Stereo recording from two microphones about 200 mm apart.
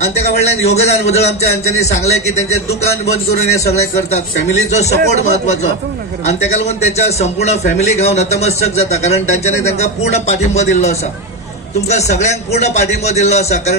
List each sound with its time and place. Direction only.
0.0 s a man's voice: 35° left (ahead or behind)